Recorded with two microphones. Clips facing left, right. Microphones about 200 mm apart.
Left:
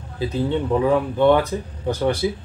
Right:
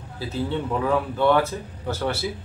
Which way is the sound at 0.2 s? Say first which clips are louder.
Left 5 dB; 20° left (ahead or behind).